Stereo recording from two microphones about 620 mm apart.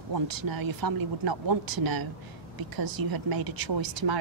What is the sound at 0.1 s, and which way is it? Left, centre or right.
A woman's voice, right.